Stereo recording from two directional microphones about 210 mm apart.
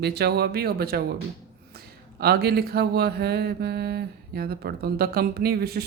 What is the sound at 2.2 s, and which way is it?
Mantra, 50° right (ahead or behind).